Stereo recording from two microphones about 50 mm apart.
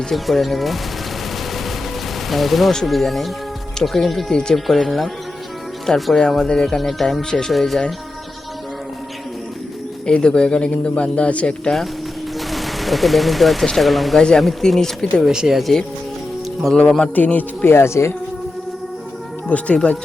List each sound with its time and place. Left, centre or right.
0.1 s speech: centre
2.3 s speech: centre
7.5 s speech: centre
10.1 s speech: centre
12.4 s gunshot: centre
13.7 s speech: centre
14.2 s speech: centre
15.2 s speech: centre
17.2 s speech: left
17.7 s speech: left
19.5 s speech: left